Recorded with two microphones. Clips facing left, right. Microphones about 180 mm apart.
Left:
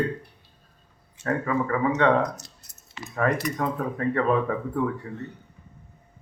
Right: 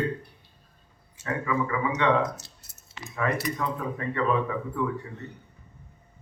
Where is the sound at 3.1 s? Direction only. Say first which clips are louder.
Left 3 dB; 45° left (ahead or behind).